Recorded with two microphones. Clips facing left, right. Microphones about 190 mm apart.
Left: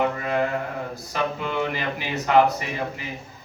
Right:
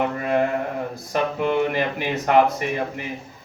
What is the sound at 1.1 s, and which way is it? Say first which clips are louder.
Speech: right 5 dB; 50° right (ahead or behind).